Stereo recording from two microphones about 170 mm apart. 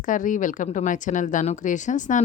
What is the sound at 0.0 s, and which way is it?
Speech, 50° left (ahead or behind).